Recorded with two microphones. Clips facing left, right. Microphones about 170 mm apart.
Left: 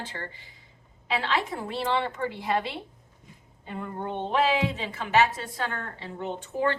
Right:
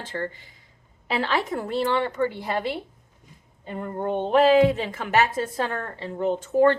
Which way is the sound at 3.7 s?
45° right (ahead or behind).